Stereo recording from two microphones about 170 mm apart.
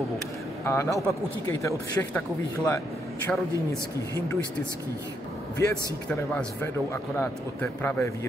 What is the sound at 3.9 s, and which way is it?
Speech, 20° left (ahead or behind).